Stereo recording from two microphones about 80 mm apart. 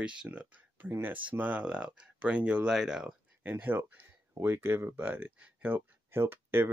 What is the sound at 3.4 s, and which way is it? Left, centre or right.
Speech, right.